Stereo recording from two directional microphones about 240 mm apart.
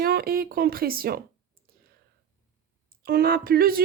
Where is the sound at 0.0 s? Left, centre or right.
Right.